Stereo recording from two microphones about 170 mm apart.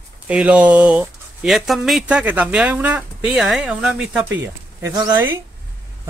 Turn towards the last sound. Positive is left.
turn(degrees=-15)  # may be behind; listen again after turning